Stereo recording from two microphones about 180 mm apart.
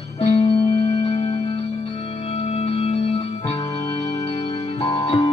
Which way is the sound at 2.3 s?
35° left (ahead or behind).